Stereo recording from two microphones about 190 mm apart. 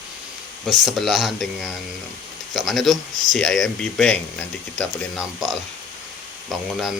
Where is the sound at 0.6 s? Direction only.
Centre (ahead or behind).